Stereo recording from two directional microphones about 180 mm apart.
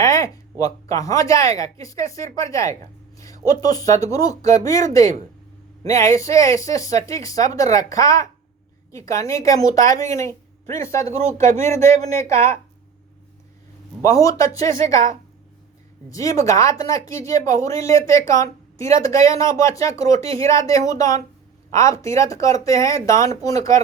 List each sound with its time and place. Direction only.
0.0 s a sound: 15° left (ahead or behind)
0.6 s speech: 20° left (ahead or behind)
3.2 s a sound: 20° left (ahead or behind)
3.6 s speech: 20° left (ahead or behind)
9.8 s speech: 45° right (ahead or behind)
10.1 s speech: 15° left (ahead or behind)
14.0 s speech: 20° left (ahead or behind)
16.0 s speech: 20° left (ahead or behind)